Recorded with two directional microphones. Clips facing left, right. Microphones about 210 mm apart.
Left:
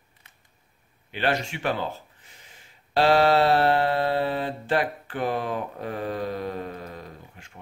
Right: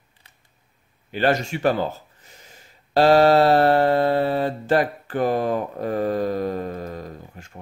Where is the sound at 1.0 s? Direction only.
40° right (ahead or behind).